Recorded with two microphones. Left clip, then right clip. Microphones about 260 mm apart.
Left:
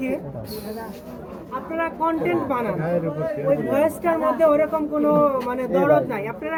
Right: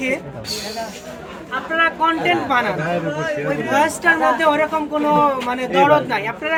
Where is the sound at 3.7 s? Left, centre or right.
Right.